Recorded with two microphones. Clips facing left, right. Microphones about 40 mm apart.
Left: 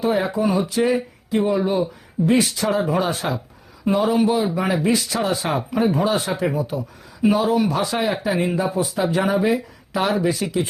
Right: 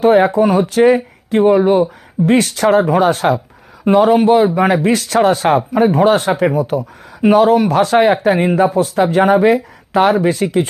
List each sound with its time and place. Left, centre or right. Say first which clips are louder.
0.0 s speech: right 10 dB; right
6.3 s speech: right 7 dB; right
6.6 s speech: right 8 dB; right